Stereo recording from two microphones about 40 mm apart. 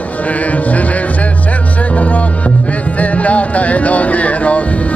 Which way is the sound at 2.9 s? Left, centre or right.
Left.